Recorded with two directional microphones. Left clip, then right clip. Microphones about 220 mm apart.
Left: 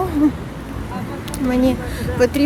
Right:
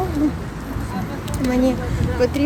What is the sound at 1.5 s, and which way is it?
Speech, 10° left (ahead or behind).